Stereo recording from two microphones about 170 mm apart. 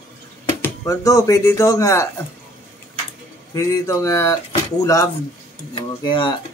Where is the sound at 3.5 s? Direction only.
15° left (ahead or behind).